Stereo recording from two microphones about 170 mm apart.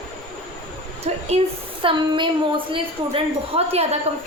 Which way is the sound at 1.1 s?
40° right (ahead or behind).